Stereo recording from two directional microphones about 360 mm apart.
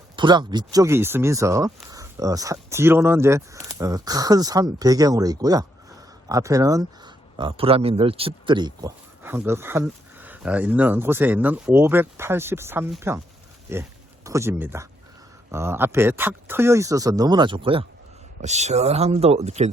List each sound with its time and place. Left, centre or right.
0.2 s speech: centre